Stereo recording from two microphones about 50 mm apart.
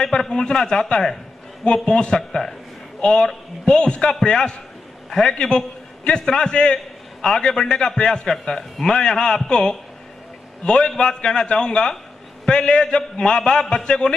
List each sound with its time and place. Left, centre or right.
0.0 s a man's voice: centre